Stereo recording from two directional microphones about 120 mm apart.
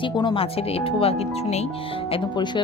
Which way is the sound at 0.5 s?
55° left (ahead or behind).